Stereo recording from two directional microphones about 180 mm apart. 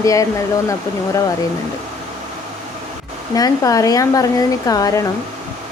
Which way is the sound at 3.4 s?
20° left (ahead or behind).